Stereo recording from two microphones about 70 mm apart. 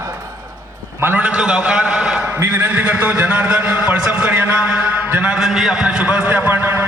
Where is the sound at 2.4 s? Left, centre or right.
Right.